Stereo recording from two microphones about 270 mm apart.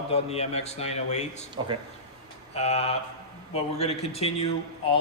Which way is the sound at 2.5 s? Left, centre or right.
Left.